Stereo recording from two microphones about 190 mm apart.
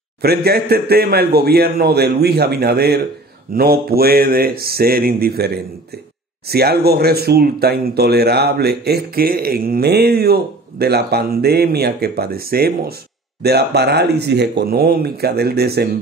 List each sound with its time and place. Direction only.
0.2 s speech: 55° right (ahead or behind)